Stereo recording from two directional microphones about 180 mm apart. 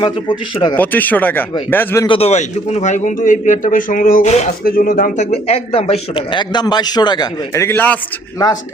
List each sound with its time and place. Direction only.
0.0 s a man's voice: 25° left (ahead or behind)
0.8 s speech: 10° left (ahead or behind)
2.0 s speech: 35° left (ahead or behind)
4.6 s a man's voice: 55° left (ahead or behind); by 7.9 s 10° left (ahead or behind)